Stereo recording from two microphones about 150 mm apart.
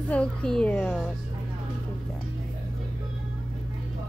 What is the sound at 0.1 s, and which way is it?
Speech, 5° left (ahead or behind).